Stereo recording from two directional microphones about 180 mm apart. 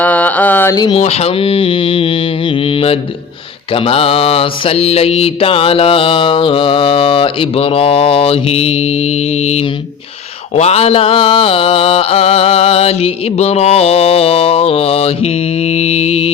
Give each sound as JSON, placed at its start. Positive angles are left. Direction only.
{"t": 0.0, "sound": "mantra", "side_deg": 10}
{"t": 0.9, "sound": "speech", "side_deg": 35}
{"t": 2.6, "sound": "mantra", "side_deg": 30}